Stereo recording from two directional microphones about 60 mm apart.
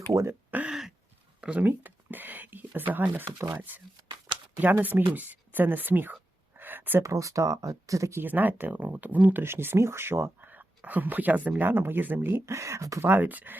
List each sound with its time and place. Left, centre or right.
0.1 s speech: right
0.7 s a sound: centre
1.4 s a sound: centre
1.6 s speech: right
4.8 s speech: right
6.6 s a sound: right
7.0 s speech: right
8.2 s speech: right
9.4 s speech: right
10.5 s speech: right
12.5 s speech: right
13.0 s speech: right